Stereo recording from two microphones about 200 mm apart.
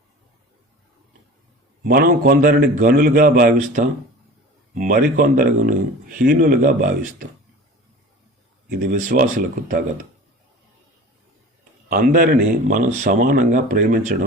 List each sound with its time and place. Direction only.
1.8 s speech: 45° right (ahead or behind)
8.7 s speech: 45° right (ahead or behind)
11.9 s speech: 45° right (ahead or behind)